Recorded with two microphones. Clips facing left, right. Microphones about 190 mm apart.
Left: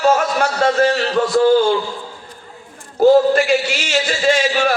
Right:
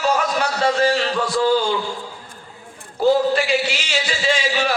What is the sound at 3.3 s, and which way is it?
A man's voice, 45° left (ahead or behind).